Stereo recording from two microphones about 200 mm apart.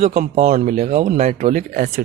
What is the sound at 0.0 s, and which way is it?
Speech, 35° right (ahead or behind).